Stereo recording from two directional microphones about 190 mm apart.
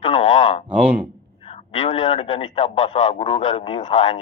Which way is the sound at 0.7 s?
5° right (ahead or behind).